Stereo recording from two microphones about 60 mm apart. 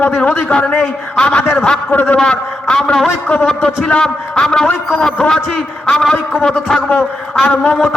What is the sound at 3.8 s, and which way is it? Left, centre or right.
Speech, centre.